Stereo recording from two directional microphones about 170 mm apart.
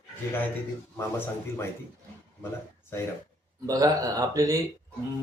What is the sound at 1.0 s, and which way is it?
Speech, 15° left (ahead or behind).